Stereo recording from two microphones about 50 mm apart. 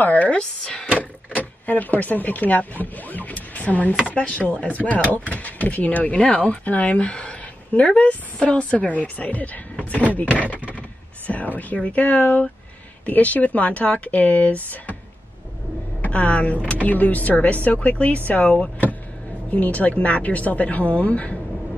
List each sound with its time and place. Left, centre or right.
0.0 s a sound: left
0.4 s speech: centre
1.3 s speech: left
16.0 s speech: left
19.5 s speech: left